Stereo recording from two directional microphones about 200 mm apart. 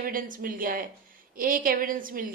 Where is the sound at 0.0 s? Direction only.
45° right (ahead or behind).